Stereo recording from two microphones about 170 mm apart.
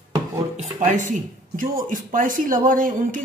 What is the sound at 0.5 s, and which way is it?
Speech, 45° right (ahead or behind).